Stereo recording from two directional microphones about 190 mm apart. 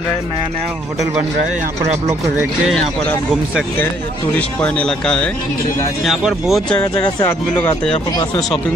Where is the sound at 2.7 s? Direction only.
Centre (ahead or behind).